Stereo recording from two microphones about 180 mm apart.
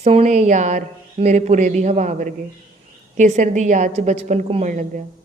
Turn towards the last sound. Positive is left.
turn(degrees=-45)  # may be behind; listen again after turning